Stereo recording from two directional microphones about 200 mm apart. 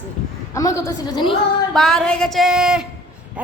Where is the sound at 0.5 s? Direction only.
15° left (ahead or behind).